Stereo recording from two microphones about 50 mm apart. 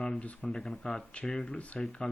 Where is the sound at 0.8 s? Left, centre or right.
Left.